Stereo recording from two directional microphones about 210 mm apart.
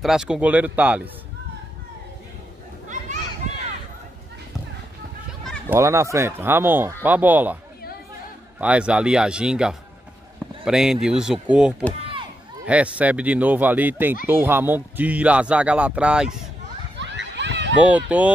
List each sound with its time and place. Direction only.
0.0 s speech: 5° right (ahead or behind)
2.9 s children playing: 35° right (ahead or behind)
5.7 s speech: 15° right (ahead or behind)
8.5 s a man's voice: 5° right (ahead or behind)
17.0 s a sound: 60° right (ahead or behind)
17.7 s speech: 5° right (ahead or behind)